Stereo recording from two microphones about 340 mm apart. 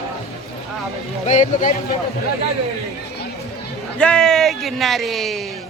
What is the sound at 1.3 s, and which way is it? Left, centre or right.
Speech, left.